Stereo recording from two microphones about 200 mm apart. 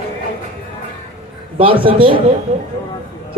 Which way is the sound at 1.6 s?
25° right (ahead or behind).